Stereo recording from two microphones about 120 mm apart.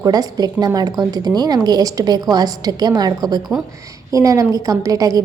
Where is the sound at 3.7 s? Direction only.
25° right (ahead or behind).